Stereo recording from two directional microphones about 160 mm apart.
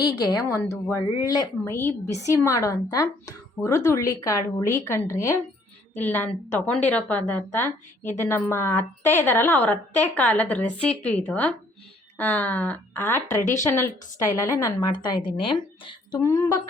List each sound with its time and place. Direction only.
0.3 s a woman's voice: 20° left (ahead or behind)
16.1 s a woman's voice: 20° left (ahead or behind)